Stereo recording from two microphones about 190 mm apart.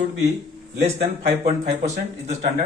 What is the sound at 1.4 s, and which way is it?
Speech, 35° right (ahead or behind).